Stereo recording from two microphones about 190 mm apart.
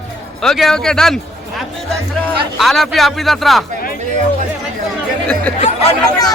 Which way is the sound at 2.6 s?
Centre (ahead or behind).